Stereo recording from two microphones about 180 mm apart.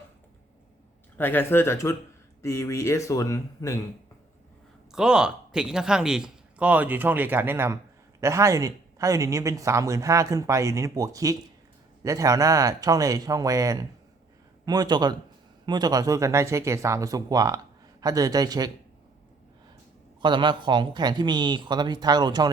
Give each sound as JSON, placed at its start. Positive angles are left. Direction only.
{"t": 1.2, "sound": "speech", "side_deg": 10}
{"t": 4.9, "sound": "a man's voice", "side_deg": -5}
{"t": 20.2, "sound": "speech", "side_deg": -25}